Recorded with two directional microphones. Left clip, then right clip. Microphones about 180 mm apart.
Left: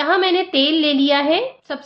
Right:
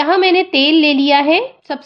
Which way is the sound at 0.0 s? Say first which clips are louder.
Right 4 dB; 25° right (ahead or behind).